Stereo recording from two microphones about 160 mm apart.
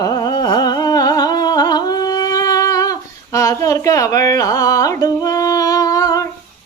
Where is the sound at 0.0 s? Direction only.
25° left (ahead or behind).